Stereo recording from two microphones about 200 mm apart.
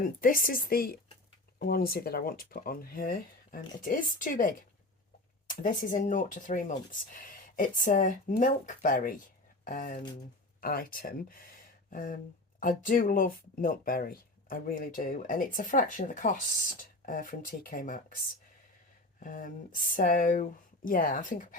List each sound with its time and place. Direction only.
0.0 s speech: 45° left (ahead or behind)
19.2 s speech: 40° left (ahead or behind)